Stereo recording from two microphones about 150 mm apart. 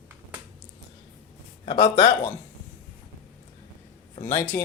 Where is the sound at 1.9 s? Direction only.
40° left (ahead or behind).